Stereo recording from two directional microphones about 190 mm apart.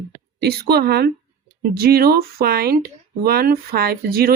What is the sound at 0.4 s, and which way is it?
A woman's voice, 55° right (ahead or behind).